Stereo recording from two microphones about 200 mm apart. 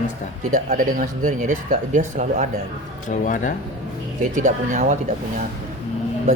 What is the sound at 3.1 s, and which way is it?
Speech, 40° left (ahead or behind).